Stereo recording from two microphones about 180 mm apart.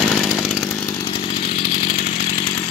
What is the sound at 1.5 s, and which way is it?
Chainsaw, 50° left (ahead or behind).